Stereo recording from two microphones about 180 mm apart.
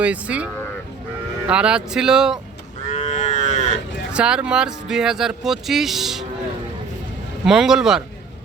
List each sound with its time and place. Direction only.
0.0 s cattle: 5° right (ahead or behind)
1.5 s speech: 5° right (ahead or behind)
2.9 s livestock: 40° left (ahead or behind)
4.1 s speech: 5° right (ahead or behind)
7.4 s speech: 5° right (ahead or behind)